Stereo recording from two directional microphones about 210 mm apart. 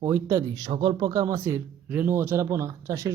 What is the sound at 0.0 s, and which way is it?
Speech, 10° right (ahead or behind).